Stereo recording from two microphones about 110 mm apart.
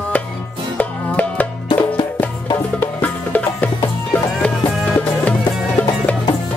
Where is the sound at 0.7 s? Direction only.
15° left (ahead or behind).